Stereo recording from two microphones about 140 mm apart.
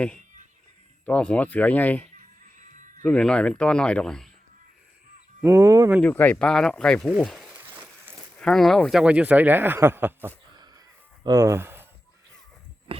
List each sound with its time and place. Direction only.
1.0 s speech: 10° left (ahead or behind)
2.1 s music: 65° right (ahead or behind)
3.0 s speech: 5° left (ahead or behind)
5.4 s speech: 20° right (ahead or behind)
6.0 s speech: 10° left (ahead or behind); by 10.3 s 15° right (ahead or behind)
11.2 s speech: 25° right (ahead or behind)